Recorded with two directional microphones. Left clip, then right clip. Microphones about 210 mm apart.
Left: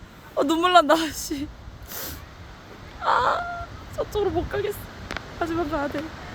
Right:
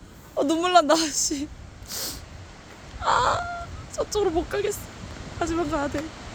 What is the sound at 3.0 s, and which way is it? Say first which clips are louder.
Chicken: left 1 dB; centre (ahead or behind).